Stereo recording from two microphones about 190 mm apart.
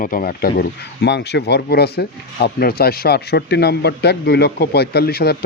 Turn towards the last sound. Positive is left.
turn(degrees=55)  # may be behind; listen again after turning